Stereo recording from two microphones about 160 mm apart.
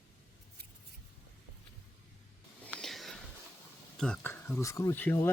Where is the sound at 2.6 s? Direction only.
5° left (ahead or behind).